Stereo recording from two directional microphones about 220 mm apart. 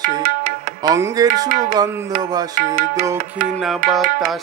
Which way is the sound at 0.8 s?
15° right (ahead or behind).